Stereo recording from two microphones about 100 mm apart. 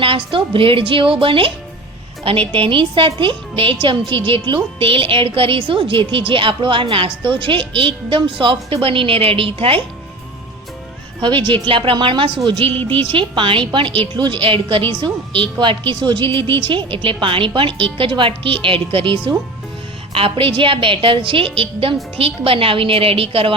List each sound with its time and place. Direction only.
0.0 s a woman's voice: 60° right (ahead or behind)
11.2 s a woman's voice: 50° right (ahead or behind); by 23.6 s 70° right (ahead or behind)